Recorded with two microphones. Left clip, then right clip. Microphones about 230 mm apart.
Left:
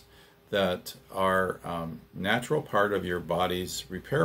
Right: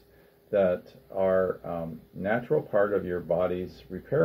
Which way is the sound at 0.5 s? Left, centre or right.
Left.